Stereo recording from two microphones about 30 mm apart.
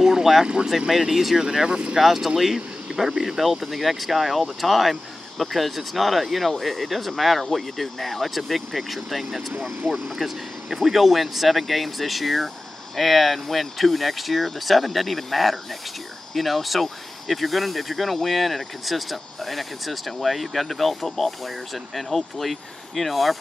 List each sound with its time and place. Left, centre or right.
0.0 s vehicle: centre
0.7 s speech: centre
1.7 s speech: right
2.0 s speech: centre
3.5 s speech: centre